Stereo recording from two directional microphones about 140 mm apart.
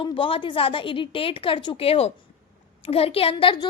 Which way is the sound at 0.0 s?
35° left (ahead or behind).